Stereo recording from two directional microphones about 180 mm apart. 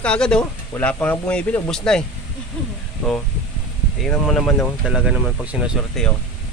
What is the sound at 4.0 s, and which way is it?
Speech, centre (ahead or behind).